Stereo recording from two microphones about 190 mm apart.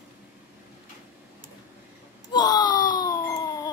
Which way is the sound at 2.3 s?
20° left (ahead or behind).